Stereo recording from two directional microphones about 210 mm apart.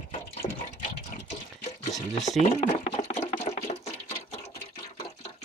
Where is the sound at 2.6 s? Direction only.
30° left (ahead or behind).